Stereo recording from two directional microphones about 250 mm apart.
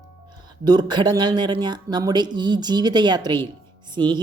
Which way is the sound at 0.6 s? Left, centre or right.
Centre.